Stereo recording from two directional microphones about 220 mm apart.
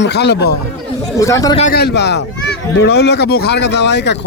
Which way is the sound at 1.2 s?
15° left (ahead or behind).